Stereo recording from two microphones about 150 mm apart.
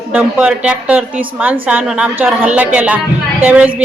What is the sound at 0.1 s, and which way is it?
A woman's voice, 5° right (ahead or behind).